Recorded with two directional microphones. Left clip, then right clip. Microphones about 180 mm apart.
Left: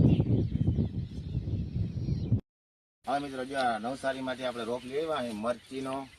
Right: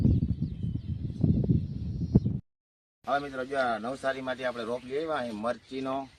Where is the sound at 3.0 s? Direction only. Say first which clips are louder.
Right 2 dB; centre (ahead or behind).